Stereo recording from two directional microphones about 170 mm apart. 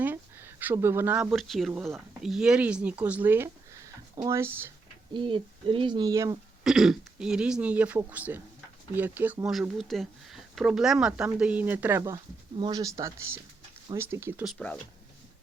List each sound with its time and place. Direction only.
0.0 s speech: 10° right (ahead or behind)
5.1 s speech: 30° right (ahead or behind)
6.7 s speech: 5° right (ahead or behind)
12.5 s speech: 25° right (ahead or behind)